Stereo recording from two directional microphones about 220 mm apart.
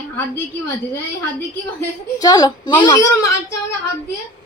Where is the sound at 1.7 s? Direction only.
15° left (ahead or behind).